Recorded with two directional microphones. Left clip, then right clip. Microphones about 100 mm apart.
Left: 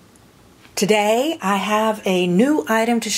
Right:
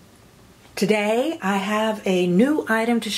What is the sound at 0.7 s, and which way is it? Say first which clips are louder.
Speech: left 4 dB; 30° left (ahead or behind).